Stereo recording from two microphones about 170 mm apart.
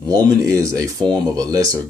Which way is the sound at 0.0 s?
20° right (ahead or behind).